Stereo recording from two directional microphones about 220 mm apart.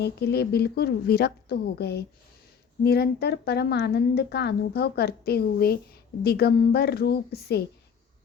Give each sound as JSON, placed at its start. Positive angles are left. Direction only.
{"t": 0.0, "sound": "a woman's voice", "side_deg": 50}